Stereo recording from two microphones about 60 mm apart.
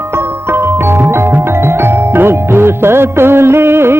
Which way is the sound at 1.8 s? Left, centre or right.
Right.